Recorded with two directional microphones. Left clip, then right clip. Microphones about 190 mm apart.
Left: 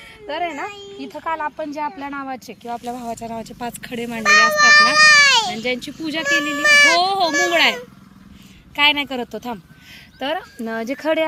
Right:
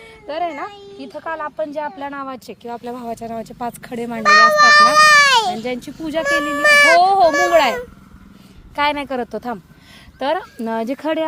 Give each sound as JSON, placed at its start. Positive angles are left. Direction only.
{"t": 0.3, "sound": "a woman's voice", "side_deg": -30}
{"t": 4.2, "sound": "speech", "side_deg": -65}
{"t": 5.9, "sound": "speech", "side_deg": -55}
{"t": 6.3, "sound": "a woman's voice", "side_deg": -35}
{"t": 6.6, "sound": "speech", "side_deg": -55}
{"t": 7.0, "sound": "a woman's voice", "side_deg": -40}